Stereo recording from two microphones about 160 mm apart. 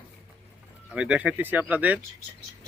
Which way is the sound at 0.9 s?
5° right (ahead or behind).